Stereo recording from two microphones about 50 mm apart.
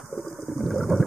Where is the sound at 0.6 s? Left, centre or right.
Centre.